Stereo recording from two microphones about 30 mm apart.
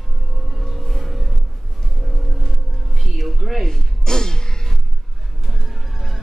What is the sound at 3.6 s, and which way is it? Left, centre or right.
Music, left.